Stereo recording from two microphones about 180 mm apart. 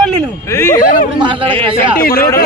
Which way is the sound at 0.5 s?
15° left (ahead or behind).